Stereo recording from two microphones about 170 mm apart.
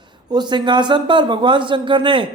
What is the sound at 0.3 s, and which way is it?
A man's voice, 25° right (ahead or behind).